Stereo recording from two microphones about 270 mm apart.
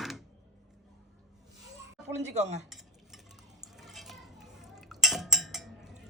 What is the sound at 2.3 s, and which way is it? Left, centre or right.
Speech, right.